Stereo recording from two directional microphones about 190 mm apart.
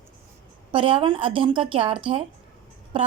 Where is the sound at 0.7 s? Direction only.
25° right (ahead or behind).